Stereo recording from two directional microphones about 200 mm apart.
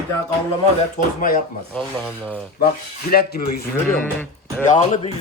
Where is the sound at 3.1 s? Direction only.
50° left (ahead or behind).